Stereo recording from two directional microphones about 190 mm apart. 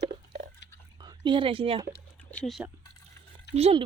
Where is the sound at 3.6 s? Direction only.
30° right (ahead or behind).